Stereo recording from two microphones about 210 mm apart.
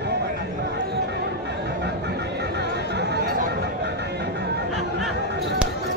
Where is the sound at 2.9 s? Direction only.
50° right (ahead or behind).